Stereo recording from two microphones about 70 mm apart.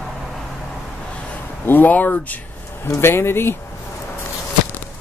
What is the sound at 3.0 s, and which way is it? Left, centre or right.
Speech, left.